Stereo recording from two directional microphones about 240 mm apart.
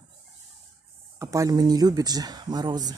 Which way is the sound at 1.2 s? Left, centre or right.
Centre.